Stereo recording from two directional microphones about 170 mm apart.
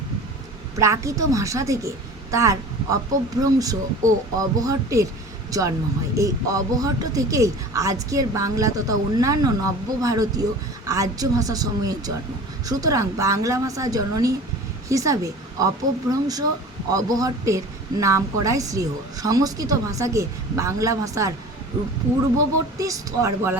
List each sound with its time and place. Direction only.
0.8 s speech: 20° right (ahead or behind)
22.8 s a woman's voice: 20° right (ahead or behind)